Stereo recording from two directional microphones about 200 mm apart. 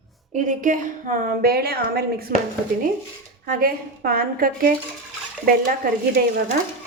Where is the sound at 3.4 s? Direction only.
45° right (ahead or behind).